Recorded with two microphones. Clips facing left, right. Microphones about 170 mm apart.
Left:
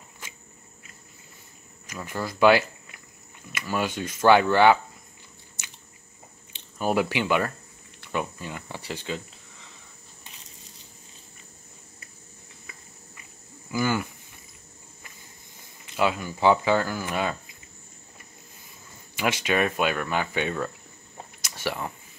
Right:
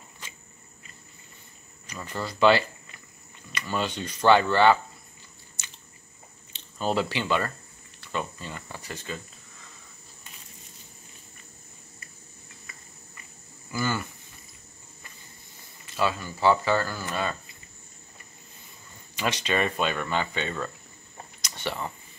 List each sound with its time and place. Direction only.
1.9 s speech: 10° left (ahead or behind)
6.8 s speech: 10° left (ahead or behind)
13.7 s a sound: 15° left (ahead or behind)
16.0 s speech: 15° left (ahead or behind)
19.1 s speech: 10° left (ahead or behind)
21.4 s a sound: 10° left (ahead or behind)